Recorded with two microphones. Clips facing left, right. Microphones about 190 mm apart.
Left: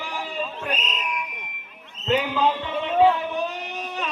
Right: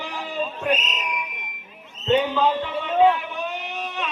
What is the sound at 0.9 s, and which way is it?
A man's voice, centre (ahead or behind).